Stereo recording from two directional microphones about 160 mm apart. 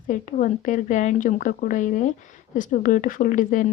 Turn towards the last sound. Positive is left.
turn(degrees=55)  # may be behind; listen again after turning